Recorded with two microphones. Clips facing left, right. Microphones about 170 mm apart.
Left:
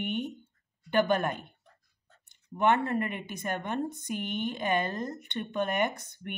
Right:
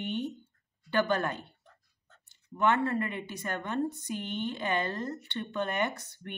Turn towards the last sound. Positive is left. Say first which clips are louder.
# left 2 dB
turn(degrees=20)  # may be behind; listen again after turning